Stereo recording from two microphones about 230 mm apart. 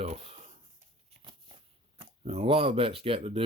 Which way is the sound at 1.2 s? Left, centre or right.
Right.